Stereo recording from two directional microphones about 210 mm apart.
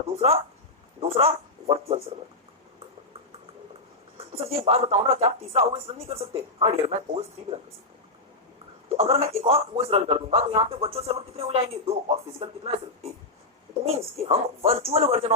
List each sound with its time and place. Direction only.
1.0 s a man's voice: 25° right (ahead or behind)
4.2 s a man's voice: 30° right (ahead or behind)
9.0 s a man's voice: 30° right (ahead or behind)